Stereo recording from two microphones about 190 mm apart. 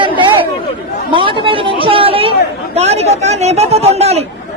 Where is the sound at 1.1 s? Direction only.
25° right (ahead or behind).